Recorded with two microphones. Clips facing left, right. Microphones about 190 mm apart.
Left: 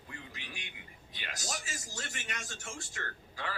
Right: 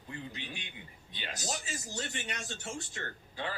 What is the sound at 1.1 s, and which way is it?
Speech, 20° right (ahead or behind).